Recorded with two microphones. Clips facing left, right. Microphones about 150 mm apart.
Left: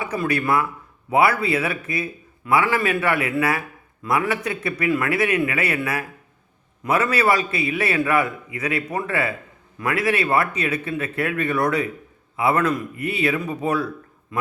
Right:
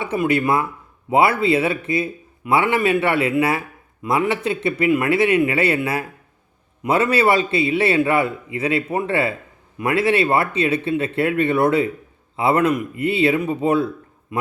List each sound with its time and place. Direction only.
0.0 s a man's voice: 25° right (ahead or behind)